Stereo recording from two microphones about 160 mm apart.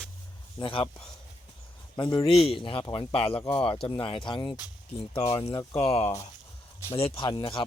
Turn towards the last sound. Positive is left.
turn(degrees=35)  # may be behind; listen again after turning